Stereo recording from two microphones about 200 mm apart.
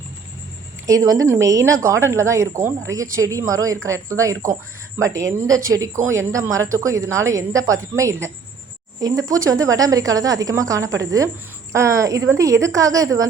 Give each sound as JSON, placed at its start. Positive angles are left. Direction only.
{"t": 0.9, "sound": "a woman's voice", "side_deg": -15}